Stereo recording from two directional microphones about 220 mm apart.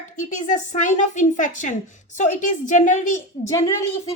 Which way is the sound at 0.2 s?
35° left (ahead or behind).